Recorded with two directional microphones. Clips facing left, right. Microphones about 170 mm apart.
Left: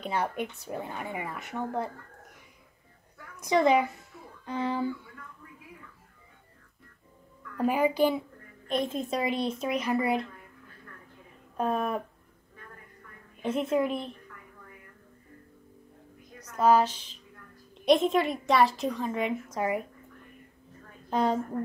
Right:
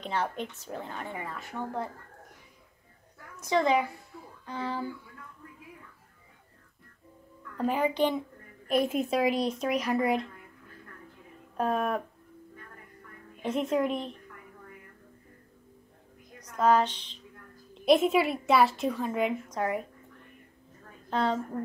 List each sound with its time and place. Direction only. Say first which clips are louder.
0.0 s speech: left 1 dB; 10° left (ahead or behind)
3.3 s speech: left 2 dB; 15° left (ahead or behind)
7.5 s speech: left 2 dB; 10° left (ahead or behind)
8.6 s a woman's voice: right 3 dB; 5° right (ahead or behind)
11.5 s a woman's voice: even; centre (ahead or behind)
13.4 s a woman's voice: left 1 dB; centre (ahead or behind)
16.5 s speech: left 2 dB; 5° left (ahead or behind)
17.7 s a woman's voice: even; 5° right (ahead or behind)
21.1 s a woman's voice: left 2 dB; 15° left (ahead or behind)